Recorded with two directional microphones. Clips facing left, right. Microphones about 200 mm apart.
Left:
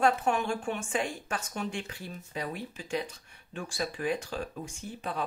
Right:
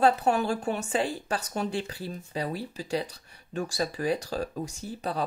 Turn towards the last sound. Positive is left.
turn(degrees=-35)  # may be behind; listen again after turning